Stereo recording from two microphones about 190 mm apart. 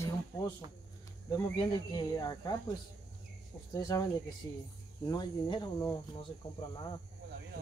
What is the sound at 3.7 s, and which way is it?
Speech, 20° left (ahead or behind).